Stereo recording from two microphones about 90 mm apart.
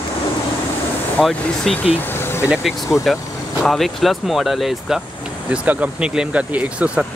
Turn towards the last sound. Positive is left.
turn(degrees=-15)  # may be behind; listen again after turning